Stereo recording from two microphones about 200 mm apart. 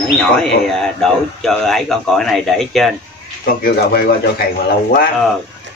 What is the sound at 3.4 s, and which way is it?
Speech, 45° left (ahead or behind).